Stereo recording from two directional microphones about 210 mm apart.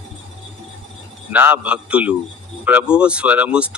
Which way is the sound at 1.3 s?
5° right (ahead or behind).